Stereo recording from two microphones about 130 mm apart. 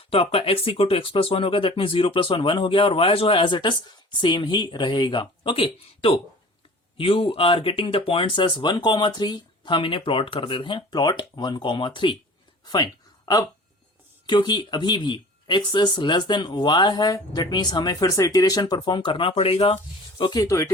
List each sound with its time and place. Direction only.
0.0 s speech: 45° left (ahead or behind)
12.6 s a sound: 35° left (ahead or behind)
14.3 s speech: 35° left (ahead or behind)